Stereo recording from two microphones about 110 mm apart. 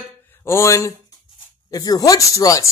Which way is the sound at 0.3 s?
25° left (ahead or behind).